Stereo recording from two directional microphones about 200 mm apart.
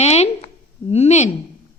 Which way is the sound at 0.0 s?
30° left (ahead or behind).